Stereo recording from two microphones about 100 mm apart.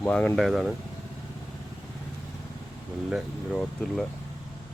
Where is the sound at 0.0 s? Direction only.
15° left (ahead or behind).